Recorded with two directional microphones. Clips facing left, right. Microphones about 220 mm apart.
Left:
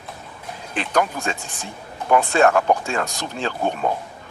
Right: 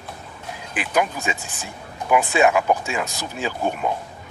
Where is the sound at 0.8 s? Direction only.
5° right (ahead or behind).